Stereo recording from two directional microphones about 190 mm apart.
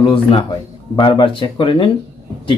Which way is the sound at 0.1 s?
30° left (ahead or behind).